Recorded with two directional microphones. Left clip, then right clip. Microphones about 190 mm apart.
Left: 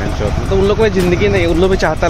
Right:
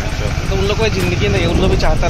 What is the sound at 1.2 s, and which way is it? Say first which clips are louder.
Speech: left 4 dB; 45° left (ahead or behind).